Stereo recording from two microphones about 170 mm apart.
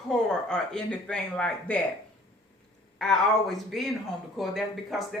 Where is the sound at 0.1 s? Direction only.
5° left (ahead or behind).